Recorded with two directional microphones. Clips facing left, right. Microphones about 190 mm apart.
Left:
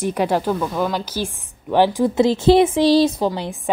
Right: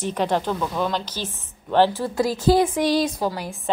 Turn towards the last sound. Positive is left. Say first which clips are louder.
# left 6 dB
turn(degrees=25)  # may be behind; listen again after turning